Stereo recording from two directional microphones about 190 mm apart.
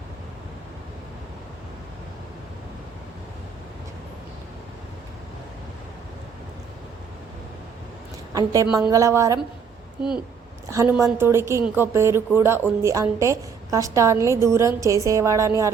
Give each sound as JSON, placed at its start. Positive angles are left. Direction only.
{"t": 8.3, "sound": "a woman's voice", "side_deg": -20}
{"t": 8.6, "sound": "a woman's voice", "side_deg": -5}
{"t": 8.9, "sound": "a woman's voice", "side_deg": -15}
{"t": 11.0, "sound": "a woman's voice", "side_deg": -15}